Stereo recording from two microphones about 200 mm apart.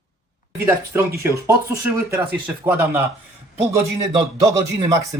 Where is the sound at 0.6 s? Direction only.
15° right (ahead or behind).